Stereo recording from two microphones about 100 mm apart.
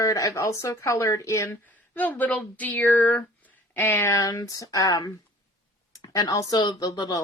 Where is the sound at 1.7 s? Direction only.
15° left (ahead or behind).